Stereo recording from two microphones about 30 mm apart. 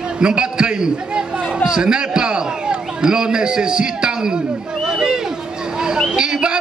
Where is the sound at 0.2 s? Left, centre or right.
Right.